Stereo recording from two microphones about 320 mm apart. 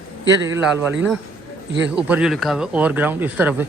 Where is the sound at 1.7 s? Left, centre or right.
Right.